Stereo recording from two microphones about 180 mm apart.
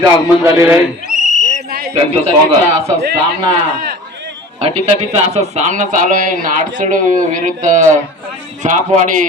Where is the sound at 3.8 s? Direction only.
60° right (ahead or behind).